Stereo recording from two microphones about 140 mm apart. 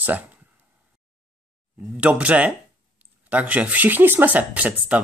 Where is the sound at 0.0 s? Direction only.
10° right (ahead or behind).